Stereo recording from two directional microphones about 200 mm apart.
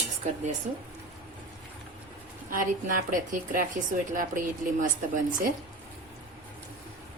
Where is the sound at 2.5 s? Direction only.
40° right (ahead or behind).